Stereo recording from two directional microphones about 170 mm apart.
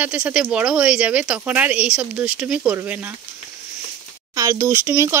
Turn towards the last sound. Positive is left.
turn(degrees=-15)  # may be behind; listen again after turning